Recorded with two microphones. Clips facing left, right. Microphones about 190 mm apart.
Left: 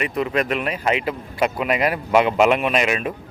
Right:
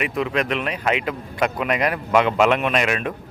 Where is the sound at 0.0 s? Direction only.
Centre (ahead or behind).